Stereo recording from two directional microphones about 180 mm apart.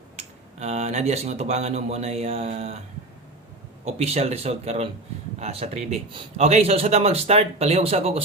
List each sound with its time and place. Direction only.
0.2 s a man's voice: 40° right (ahead or behind)
3.8 s a man's voice: 35° right (ahead or behind)